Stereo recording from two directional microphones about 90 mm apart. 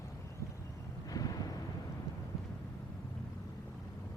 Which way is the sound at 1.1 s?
45° left (ahead or behind).